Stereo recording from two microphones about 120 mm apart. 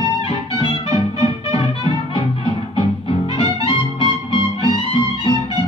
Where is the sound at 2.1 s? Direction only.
50° left (ahead or behind).